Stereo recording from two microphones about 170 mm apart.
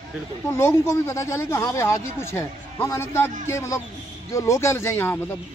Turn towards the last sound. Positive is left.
turn(degrees=15)  # may be behind; listen again after turning